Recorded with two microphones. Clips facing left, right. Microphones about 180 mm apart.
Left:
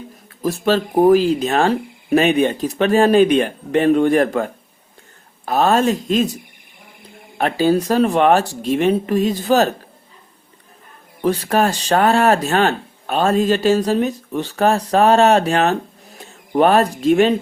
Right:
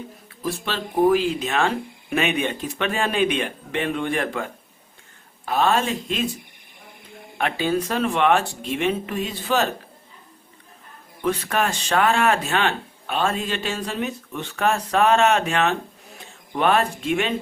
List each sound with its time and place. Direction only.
0.4 s speech: 40° left (ahead or behind)
5.5 s speech: 40° left (ahead or behind)
7.3 s speech: 35° left (ahead or behind)
11.2 s speech: 35° left (ahead or behind)